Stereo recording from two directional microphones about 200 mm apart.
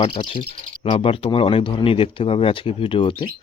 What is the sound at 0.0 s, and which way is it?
Speech, 25° left (ahead or behind).